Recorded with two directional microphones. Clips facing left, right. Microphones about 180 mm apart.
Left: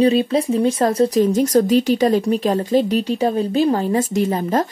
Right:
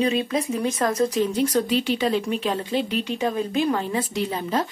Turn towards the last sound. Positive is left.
turn(degrees=45)  # may be behind; listen again after turning